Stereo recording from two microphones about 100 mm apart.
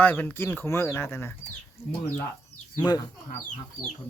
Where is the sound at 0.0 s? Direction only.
15° left (ahead or behind).